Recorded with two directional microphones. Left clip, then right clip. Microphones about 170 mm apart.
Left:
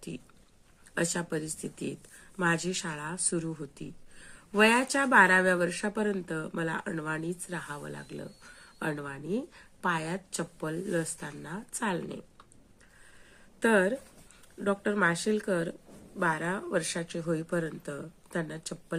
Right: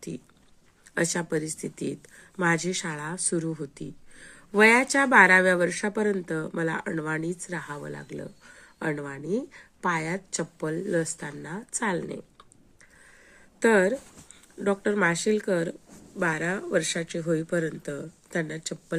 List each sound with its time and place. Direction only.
0.9 s speech: 25° right (ahead or behind)
13.6 s speech: 25° right (ahead or behind)